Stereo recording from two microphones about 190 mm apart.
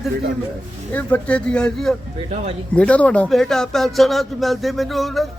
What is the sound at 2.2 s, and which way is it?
Speech, 35° right (ahead or behind).